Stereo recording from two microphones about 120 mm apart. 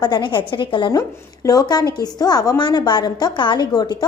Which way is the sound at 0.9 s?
30° left (ahead or behind).